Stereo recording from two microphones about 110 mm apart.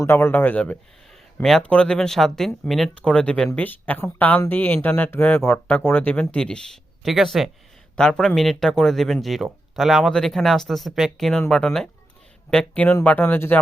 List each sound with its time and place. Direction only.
0.0 s speech: 20° left (ahead or behind)